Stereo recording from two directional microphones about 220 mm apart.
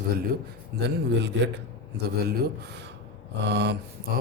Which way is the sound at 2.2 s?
45° right (ahead or behind).